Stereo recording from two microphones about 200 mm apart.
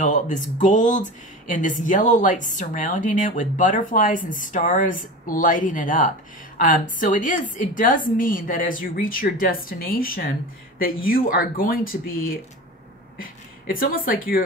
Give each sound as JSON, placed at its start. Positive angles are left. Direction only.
{"t": 0.0, "sound": "a woman's voice", "side_deg": 40}